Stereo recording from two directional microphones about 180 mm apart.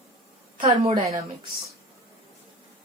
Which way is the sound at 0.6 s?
30° right (ahead or behind).